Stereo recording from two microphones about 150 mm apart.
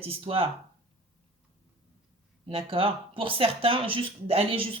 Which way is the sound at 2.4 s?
40° right (ahead or behind).